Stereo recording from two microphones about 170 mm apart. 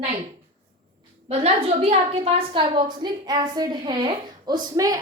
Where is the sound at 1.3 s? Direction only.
35° right (ahead or behind).